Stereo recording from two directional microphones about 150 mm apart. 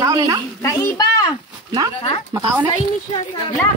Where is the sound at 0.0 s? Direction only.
25° right (ahead or behind).